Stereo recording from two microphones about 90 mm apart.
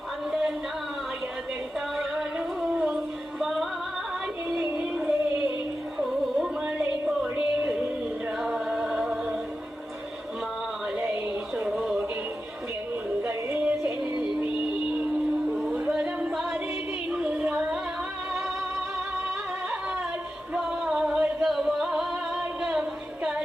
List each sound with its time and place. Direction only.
2.0 s music: 5° right (ahead or behind)
4.4 s child singing: 5° right (ahead or behind)
6.3 s music: 10° right (ahead or behind)
8.4 s chant: 5° right (ahead or behind)
10.9 s a sound: 20° right (ahead or behind)
11.5 s a sound: 5° right (ahead or behind)
13.2 s music: 25° right (ahead or behind)
15.7 s music: 5° right (ahead or behind)
20.5 s music: 5° right (ahead or behind)